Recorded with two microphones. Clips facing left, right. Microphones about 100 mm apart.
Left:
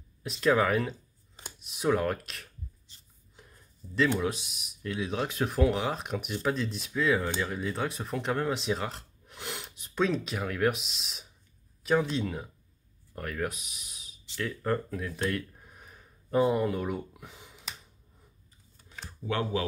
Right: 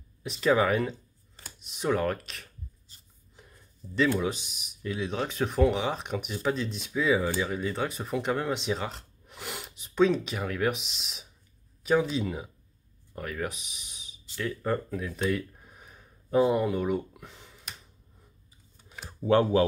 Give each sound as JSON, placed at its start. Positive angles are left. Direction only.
{"t": 0.2, "sound": "speech", "side_deg": 0}
{"t": 3.4, "sound": "a sound", "side_deg": 0}
{"t": 4.2, "sound": "speech", "side_deg": 0}
{"t": 19.0, "sound": "speech", "side_deg": -35}